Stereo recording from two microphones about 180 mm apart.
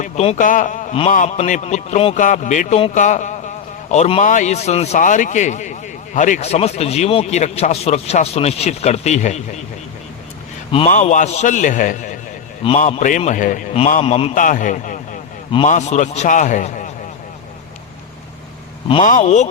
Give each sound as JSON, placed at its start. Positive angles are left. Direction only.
{"t": 0.0, "sound": "a man's voice", "side_deg": 40}
{"t": 10.7, "sound": "a man's voice", "side_deg": 30}
{"t": 10.9, "sound": "a man's voice", "side_deg": 45}
{"t": 12.6, "sound": "a man's voice", "side_deg": 35}
{"t": 14.3, "sound": "a man's voice", "side_deg": 45}
{"t": 19.0, "sound": "a man's voice", "side_deg": 40}